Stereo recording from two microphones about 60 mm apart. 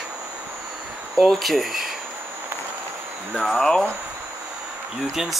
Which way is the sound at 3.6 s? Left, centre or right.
Centre.